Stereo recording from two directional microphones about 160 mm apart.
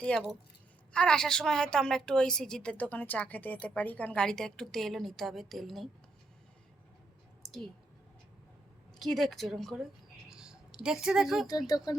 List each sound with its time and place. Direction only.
0.0 s a woman's voice: 5° left (ahead or behind)
9.0 s a woman's voice: centre (ahead or behind)
10.2 s a sound: 5° right (ahead or behind)
10.8 s a woman's voice: 5° right (ahead or behind)
11.4 s speech: 25° left (ahead or behind)